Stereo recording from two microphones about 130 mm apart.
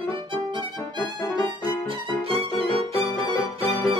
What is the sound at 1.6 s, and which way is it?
Music, 40° right (ahead or behind).